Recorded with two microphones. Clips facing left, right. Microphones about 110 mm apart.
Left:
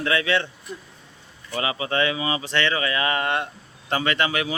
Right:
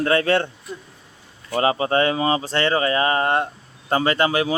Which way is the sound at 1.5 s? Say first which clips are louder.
Right 6 dB; 40° right (ahead or behind).